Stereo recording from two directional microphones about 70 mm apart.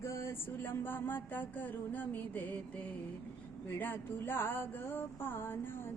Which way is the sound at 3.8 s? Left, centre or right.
Left.